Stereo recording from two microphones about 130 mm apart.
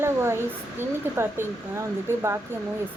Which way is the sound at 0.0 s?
20° right (ahead or behind).